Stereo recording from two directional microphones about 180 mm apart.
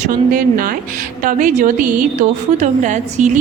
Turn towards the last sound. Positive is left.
turn(degrees=-40)  # may be behind; listen again after turning